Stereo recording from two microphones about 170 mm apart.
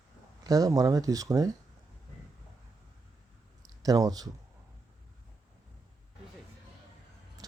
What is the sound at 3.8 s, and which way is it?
Speech, 20° right (ahead or behind).